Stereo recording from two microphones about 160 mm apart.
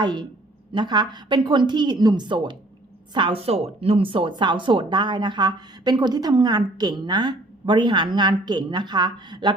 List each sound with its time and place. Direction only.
0.0 s speech: 25° right (ahead or behind)